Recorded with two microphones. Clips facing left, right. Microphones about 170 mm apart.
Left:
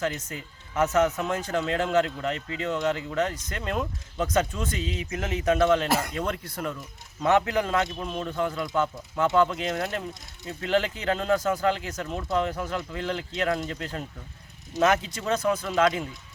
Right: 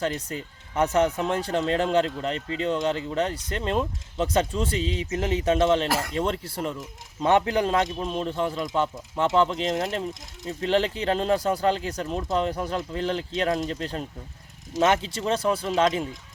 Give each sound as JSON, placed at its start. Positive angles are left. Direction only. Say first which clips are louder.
{"t": 0.0, "sound": "speech", "louder": "right 2 dB", "side_deg": -35}
{"t": 10.4, "sound": "speech", "louder": "right 2 dB", "side_deg": -30}